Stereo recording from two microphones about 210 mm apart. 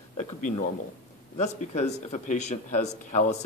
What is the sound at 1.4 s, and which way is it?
Speech, 35° left (ahead or behind).